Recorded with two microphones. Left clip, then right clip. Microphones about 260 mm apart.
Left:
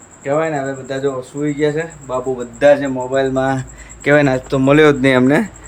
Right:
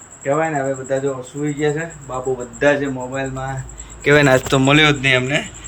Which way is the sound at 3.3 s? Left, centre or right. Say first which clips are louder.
Left 10 dB; left.